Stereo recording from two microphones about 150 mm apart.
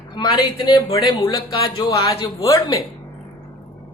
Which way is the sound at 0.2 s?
30° left (ahead or behind).